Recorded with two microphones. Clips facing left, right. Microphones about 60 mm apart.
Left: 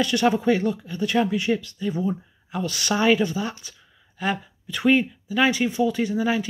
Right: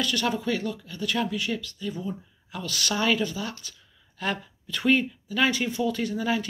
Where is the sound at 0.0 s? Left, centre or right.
Left.